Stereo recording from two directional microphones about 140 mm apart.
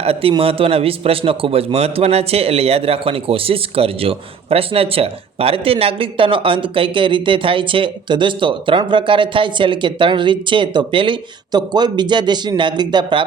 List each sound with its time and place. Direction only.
0.0 s a man's voice: 45° right (ahead or behind)